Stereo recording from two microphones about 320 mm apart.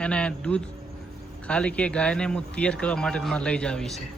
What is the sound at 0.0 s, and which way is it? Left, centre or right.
Speech, centre.